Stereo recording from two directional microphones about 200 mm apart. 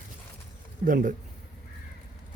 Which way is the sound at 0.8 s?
40° right (ahead or behind).